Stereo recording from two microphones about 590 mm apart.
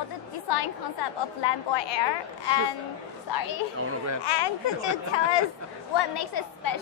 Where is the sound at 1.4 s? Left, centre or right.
Left.